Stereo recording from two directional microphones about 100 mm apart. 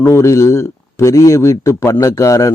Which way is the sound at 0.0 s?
25° left (ahead or behind).